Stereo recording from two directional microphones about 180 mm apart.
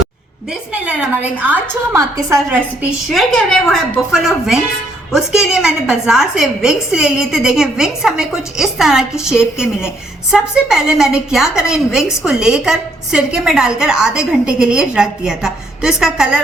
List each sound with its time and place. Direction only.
0.9 s a woman's voice: 10° right (ahead or behind)
3.1 s a woman's voice: centre (ahead or behind)